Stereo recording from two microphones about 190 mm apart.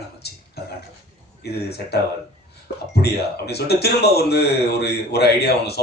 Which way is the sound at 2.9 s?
55° left (ahead or behind).